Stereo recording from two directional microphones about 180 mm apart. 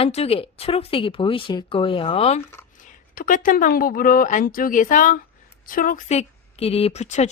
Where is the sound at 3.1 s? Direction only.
50° left (ahead or behind).